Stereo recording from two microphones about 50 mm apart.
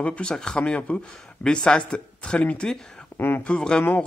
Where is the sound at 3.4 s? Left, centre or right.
Centre.